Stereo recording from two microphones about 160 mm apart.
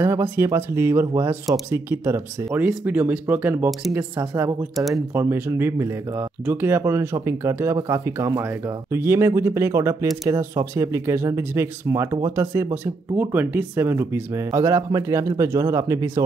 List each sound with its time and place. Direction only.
0.0 s speech: 15° right (ahead or behind)
4.7 s speech: centre (ahead or behind)
5.1 s speech: 15° right (ahead or behind)